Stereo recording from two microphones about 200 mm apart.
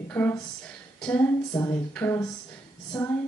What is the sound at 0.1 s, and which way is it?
Speech, 10° left (ahead or behind).